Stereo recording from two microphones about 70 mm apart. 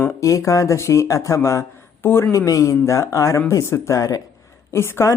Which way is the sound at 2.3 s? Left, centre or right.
Left.